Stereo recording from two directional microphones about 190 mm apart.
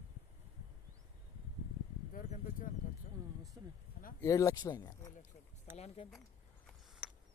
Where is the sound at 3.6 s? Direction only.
15° right (ahead or behind).